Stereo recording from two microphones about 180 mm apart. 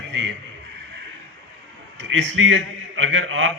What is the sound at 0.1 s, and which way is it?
Speech, 90° right.